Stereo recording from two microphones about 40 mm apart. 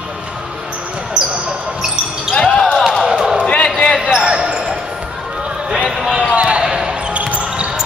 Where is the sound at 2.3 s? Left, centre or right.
Left.